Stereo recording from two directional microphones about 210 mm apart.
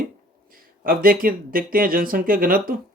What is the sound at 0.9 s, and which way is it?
Speech, 45° right (ahead or behind).